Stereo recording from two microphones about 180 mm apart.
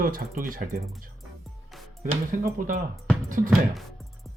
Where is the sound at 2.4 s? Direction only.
50° right (ahead or behind).